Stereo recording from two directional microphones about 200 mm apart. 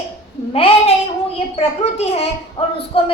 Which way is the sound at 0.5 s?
30° left (ahead or behind).